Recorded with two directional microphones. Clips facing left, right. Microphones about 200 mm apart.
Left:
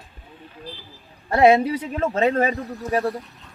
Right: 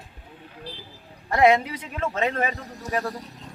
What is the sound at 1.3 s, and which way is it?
A man's voice, 30° left (ahead or behind).